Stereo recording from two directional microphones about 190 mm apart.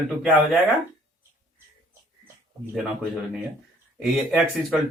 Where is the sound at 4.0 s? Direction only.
Centre (ahead or behind).